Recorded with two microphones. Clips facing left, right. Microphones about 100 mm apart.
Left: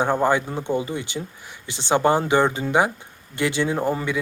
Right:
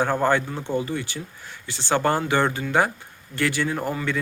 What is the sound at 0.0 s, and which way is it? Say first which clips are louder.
Speech: left 1 dB; 15° left (ahead or behind).